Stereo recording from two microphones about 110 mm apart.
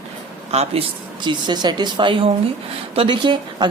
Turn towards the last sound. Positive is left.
turn(degrees=-50)  # may be behind; listen again after turning